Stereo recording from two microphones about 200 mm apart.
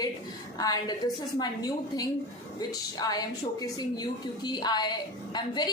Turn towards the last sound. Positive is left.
turn(degrees=20)  # may be behind; listen again after turning